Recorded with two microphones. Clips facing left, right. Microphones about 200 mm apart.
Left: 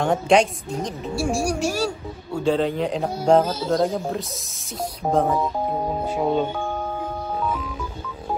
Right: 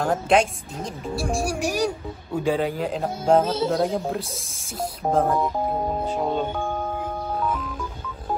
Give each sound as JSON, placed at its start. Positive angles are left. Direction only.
{"t": 0.0, "sound": "speech", "side_deg": 0}
{"t": 1.6, "sound": "a man's voice", "side_deg": -15}
{"t": 2.7, "sound": "speech", "side_deg": 0}